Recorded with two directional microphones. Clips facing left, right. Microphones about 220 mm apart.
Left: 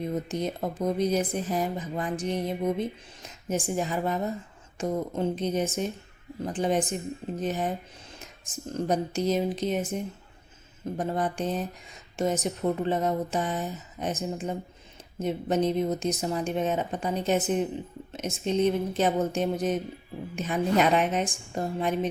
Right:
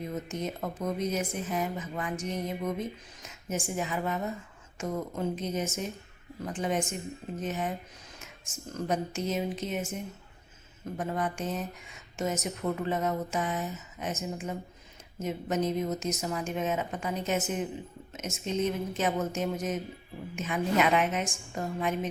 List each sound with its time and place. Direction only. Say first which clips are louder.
0.3 s speech: left 4 dB; 35° left (ahead or behind)